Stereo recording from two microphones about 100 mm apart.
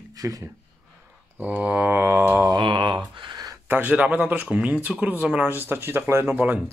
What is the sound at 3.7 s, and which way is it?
Speech, 15° right (ahead or behind).